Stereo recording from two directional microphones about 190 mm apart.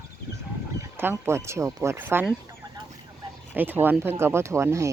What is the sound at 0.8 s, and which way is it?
Speech, 10° right (ahead or behind).